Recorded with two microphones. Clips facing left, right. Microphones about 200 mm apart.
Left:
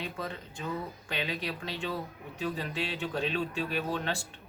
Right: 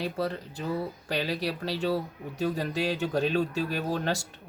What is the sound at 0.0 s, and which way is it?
Speech, 35° right (ahead or behind).